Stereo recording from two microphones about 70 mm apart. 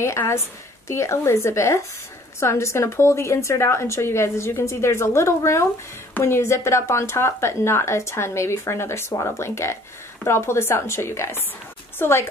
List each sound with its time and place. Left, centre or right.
0.0 s a woman's voice: left